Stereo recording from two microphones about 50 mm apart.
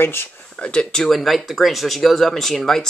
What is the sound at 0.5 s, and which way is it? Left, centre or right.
Speech, left.